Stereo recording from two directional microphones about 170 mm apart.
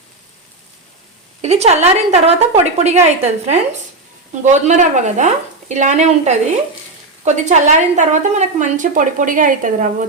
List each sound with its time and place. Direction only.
1.4 s a woman's voice: 40° right (ahead or behind)